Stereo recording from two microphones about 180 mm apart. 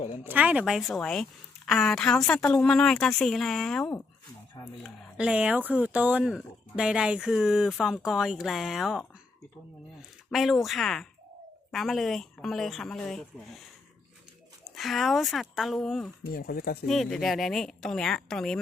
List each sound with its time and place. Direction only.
0.3 s speech: 10° right (ahead or behind)
16.3 s speech: 55° left (ahead or behind)
16.8 s speech: centre (ahead or behind)